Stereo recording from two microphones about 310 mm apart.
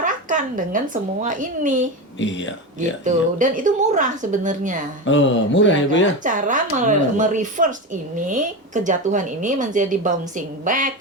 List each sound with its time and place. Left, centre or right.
0.0 s a sound: right
1.2 s speech: right
2.1 s speech: left
3.0 s speech: right
5.0 s speech: left
6.2 s speech: right